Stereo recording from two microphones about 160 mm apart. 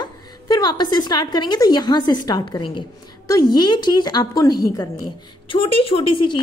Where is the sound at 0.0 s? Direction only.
25° left (ahead or behind).